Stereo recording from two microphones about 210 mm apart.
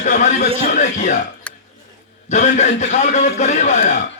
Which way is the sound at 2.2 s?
35° left (ahead or behind).